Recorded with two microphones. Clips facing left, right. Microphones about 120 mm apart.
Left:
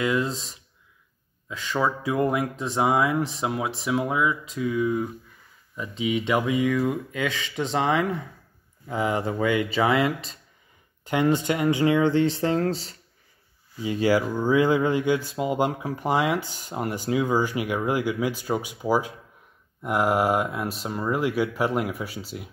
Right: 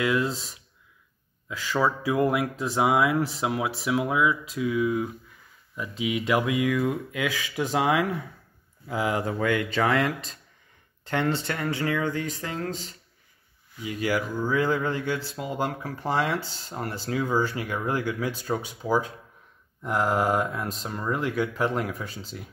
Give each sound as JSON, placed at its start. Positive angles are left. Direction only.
{"t": 0.0, "sound": "speech", "side_deg": -5}
{"t": 1.5, "sound": "speech", "side_deg": -5}
{"t": 11.1, "sound": "speech", "side_deg": 10}